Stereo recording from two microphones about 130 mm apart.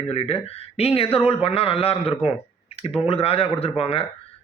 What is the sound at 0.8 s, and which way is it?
A man's voice, 50° left (ahead or behind).